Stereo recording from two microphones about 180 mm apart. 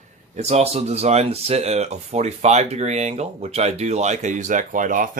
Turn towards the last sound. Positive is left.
turn(degrees=-45)  # may be behind; listen again after turning